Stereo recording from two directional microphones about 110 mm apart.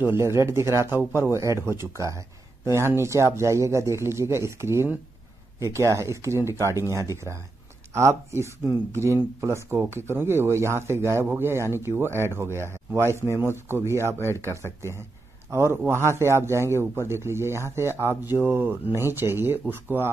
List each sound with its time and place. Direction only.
0.0 s speech: 25° right (ahead or behind)